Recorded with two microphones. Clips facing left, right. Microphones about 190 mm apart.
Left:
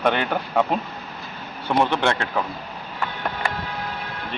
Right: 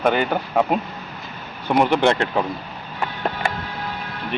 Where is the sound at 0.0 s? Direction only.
5° right (ahead or behind).